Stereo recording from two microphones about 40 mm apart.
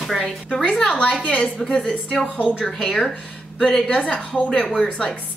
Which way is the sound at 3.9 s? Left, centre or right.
Left.